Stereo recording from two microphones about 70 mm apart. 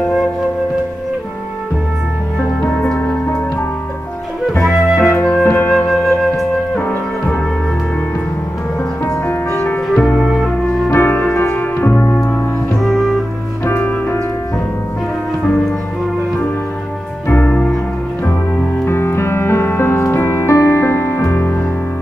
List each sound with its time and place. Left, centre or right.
3.0 s music: left
4.6 s music: centre
5.4 s music: left
5.7 s music: centre
6.8 s music: left
9.0 s music: left
9.8 s music: centre
10.9 s music: left
12.8 s music: centre
13.7 s music: left
17.3 s music: centre
18.9 s music: left